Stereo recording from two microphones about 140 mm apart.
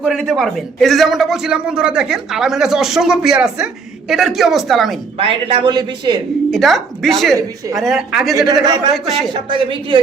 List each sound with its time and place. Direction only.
0.0 s a man's voice: centre (ahead or behind)
5.1 s a man's voice: 40° right (ahead or behind)
6.5 s a man's voice: centre (ahead or behind)
8.6 s a man's voice: 30° right (ahead or behind)